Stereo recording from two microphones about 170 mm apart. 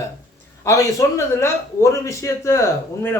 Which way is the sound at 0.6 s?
15° left (ahead or behind).